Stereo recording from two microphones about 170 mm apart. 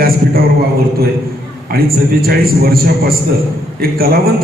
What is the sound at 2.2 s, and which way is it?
A man's voice, 65° right (ahead or behind).